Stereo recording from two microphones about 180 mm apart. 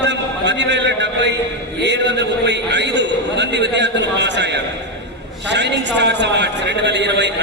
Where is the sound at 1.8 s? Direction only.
75° right (ahead or behind).